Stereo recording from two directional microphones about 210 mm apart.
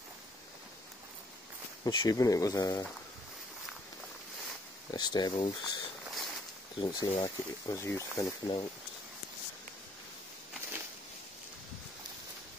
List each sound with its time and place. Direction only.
1.9 s speech: 20° left (ahead or behind)
4.9 s speech: 20° left (ahead or behind)
6.0 s a sound: centre (ahead or behind)
6.8 s speech: 20° left (ahead or behind)